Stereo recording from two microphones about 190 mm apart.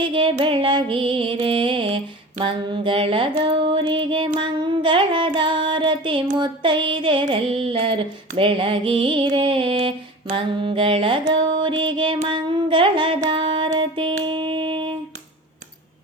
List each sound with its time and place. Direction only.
0.0 s music: 25° right (ahead or behind)
14.3 s wind instrument: 25° right (ahead or behind)